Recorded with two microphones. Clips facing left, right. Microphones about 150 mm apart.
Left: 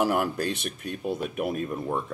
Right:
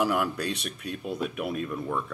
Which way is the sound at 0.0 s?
45° left (ahead or behind).